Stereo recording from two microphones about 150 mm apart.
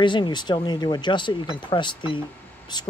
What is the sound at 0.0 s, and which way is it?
Speech, 30° left (ahead or behind).